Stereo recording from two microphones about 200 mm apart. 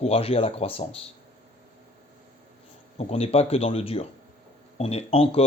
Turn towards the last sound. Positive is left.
turn(degrees=30)  # may be behind; listen again after turning